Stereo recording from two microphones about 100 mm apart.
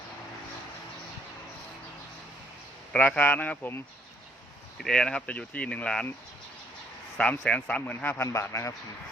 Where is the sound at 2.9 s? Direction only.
10° left (ahead or behind).